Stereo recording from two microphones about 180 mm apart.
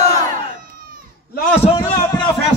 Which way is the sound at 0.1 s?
45° right (ahead or behind).